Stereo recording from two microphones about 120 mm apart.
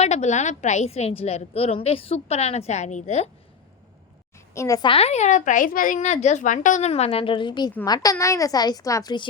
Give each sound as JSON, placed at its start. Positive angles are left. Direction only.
{"t": 0.0, "sound": "a woman's voice", "side_deg": 70}
{"t": 4.5, "sound": "a child's voice", "side_deg": 25}
{"t": 4.8, "sound": "a woman's voice", "side_deg": 50}